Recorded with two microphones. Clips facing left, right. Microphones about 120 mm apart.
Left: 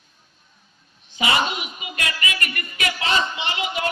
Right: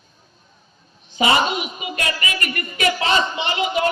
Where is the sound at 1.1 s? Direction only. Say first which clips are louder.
Right 4 dB; 30° right (ahead or behind).